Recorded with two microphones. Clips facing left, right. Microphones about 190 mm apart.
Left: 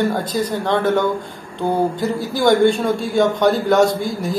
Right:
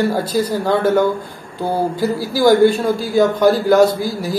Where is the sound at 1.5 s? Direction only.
5° right (ahead or behind).